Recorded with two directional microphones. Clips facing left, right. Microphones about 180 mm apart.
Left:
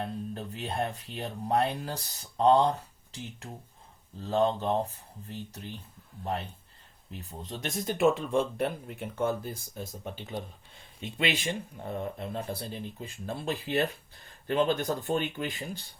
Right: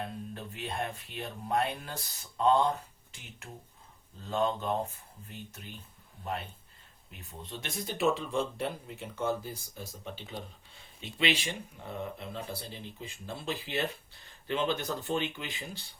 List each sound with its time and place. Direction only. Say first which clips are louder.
0.0 s speech: left 4 dB; 35° left (ahead or behind)
7.1 s a man's voice: left 4 dB; 35° left (ahead or behind)